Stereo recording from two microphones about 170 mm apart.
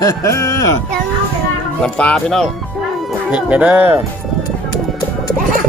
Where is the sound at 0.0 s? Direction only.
20° left (ahead or behind).